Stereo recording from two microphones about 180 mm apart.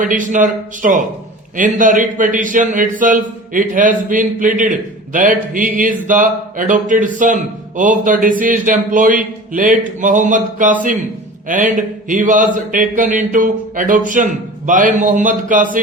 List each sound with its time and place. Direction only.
0.0 s a man's voice: 45° right (ahead or behind)